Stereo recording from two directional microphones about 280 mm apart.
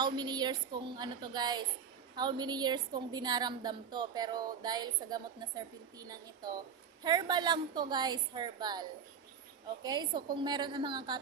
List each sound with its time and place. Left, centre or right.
0.0 s a woman's voice: centre